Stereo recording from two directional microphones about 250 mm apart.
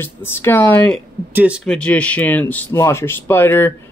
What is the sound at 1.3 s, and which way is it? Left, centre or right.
Speech, centre.